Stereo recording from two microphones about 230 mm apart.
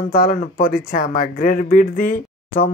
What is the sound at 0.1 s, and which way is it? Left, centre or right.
Speech, left.